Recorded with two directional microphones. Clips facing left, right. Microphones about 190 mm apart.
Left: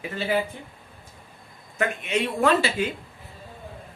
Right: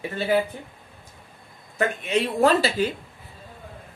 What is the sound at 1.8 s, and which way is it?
Speech, 35° right (ahead or behind).